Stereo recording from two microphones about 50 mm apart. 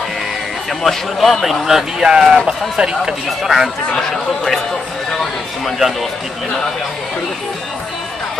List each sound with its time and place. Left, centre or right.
0.8 s speech: centre
3.4 s speech: centre
3.9 s speech: centre